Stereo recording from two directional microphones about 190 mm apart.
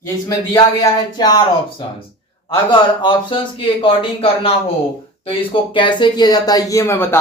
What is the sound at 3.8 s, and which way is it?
Speech, 30° left (ahead or behind).